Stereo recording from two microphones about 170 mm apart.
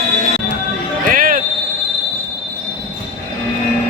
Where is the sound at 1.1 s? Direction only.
55° right (ahead or behind).